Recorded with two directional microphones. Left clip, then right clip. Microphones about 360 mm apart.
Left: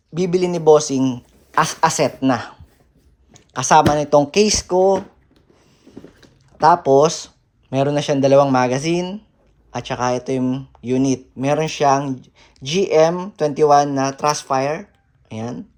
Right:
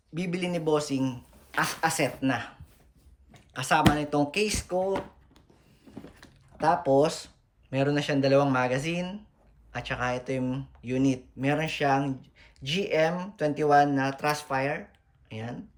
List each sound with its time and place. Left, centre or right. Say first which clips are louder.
0.1 s speech: left 13 dB; centre
6.6 s speech: left 10 dB; centre